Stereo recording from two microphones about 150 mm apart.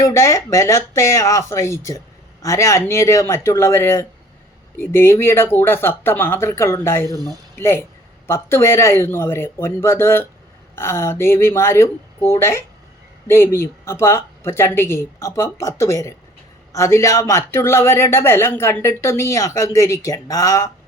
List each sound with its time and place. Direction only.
0.0 s speech: 20° left (ahead or behind)